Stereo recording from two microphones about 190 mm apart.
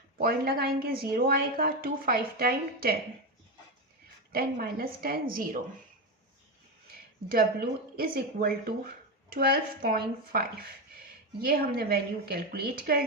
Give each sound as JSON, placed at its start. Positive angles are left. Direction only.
{"t": 0.2, "sound": "speech", "side_deg": -55}
{"t": 4.3, "sound": "speech", "side_deg": -50}
{"t": 7.3, "sound": "speech", "side_deg": -50}